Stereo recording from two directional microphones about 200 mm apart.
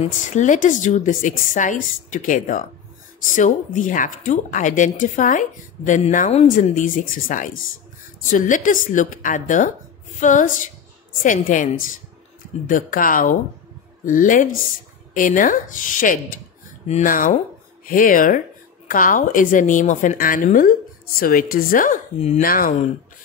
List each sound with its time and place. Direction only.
0.0 s a woman's voice: 35° left (ahead or behind)